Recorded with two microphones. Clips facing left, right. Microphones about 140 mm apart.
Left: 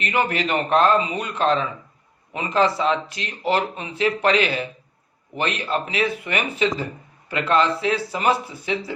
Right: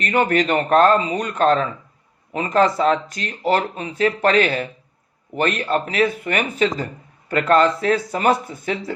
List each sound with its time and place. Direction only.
0.0 s speech: 40° right (ahead or behind)